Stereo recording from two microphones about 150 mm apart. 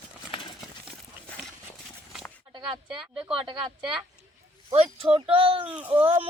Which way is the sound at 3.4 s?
35° right (ahead or behind).